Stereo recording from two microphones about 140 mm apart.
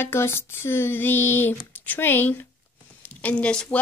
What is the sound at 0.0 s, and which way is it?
A woman's voice, 20° left (ahead or behind).